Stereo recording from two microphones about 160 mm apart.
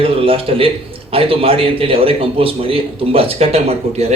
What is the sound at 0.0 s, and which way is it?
A man's voice, 35° right (ahead or behind).